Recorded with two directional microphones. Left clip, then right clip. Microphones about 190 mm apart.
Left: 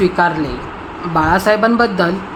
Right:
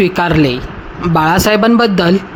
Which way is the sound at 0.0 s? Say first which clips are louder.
Right 2 dB; 35° right (ahead or behind).